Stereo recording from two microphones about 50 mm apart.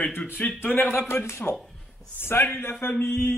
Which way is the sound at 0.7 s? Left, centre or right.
Left.